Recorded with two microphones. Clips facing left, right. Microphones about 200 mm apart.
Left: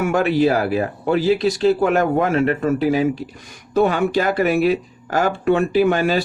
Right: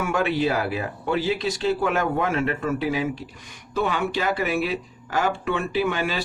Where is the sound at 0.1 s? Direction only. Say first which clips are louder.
Left 6 dB; 40° left (ahead or behind).